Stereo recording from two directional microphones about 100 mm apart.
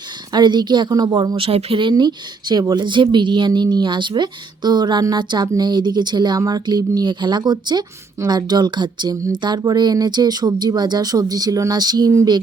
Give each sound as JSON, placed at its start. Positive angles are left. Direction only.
{"t": 0.3, "sound": "speech", "side_deg": -45}
{"t": 1.5, "sound": "speech", "side_deg": -70}
{"t": 12.1, "sound": "a sound", "side_deg": -40}